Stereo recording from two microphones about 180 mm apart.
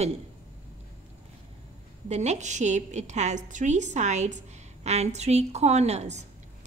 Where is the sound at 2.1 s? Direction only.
40° right (ahead or behind).